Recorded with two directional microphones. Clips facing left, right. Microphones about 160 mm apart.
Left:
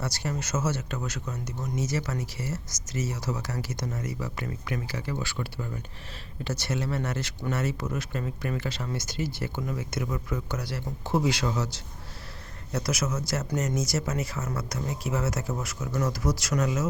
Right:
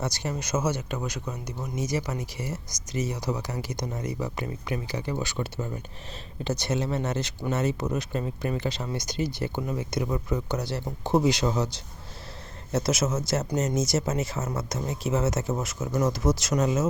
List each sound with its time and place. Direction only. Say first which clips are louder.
0.0 s speech: right 1 dB; 20° right (ahead or behind)
12.7 s speech: right 4 dB; 25° right (ahead or behind)